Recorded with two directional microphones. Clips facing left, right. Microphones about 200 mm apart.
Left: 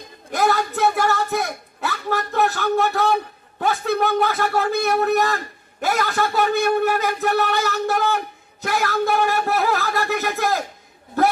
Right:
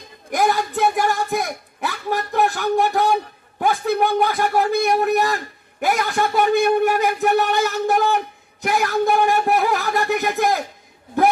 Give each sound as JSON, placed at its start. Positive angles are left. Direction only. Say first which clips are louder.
{"t": 0.3, "sound": "speech", "louder": "right 1 dB", "side_deg": -15}